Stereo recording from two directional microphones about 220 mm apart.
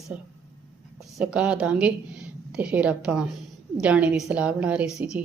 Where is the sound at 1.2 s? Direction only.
5° right (ahead or behind).